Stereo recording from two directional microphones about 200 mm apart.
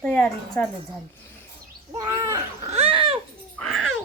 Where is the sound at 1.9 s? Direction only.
15° right (ahead or behind).